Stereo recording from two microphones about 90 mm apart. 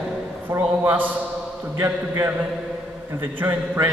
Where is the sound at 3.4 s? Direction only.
25° right (ahead or behind).